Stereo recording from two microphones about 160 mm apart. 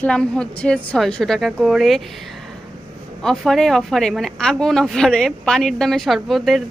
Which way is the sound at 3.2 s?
5° left (ahead or behind).